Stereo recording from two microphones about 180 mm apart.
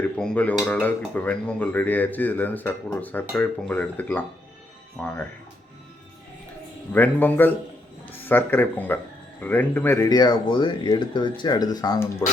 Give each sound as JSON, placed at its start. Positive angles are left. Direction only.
{"t": 0.2, "sound": "speech", "side_deg": 10}
{"t": 6.9, "sound": "speech", "side_deg": 10}